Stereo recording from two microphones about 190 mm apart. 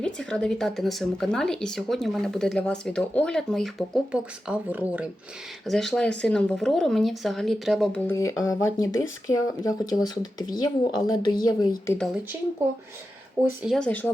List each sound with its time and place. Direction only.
0.0 s speech: 5° left (ahead or behind)
8.0 s a woman's voice: 15° left (ahead or behind)
13.6 s speech: centre (ahead or behind)